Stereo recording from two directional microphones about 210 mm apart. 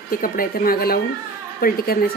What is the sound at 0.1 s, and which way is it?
A woman's voice, 45° left (ahead or behind).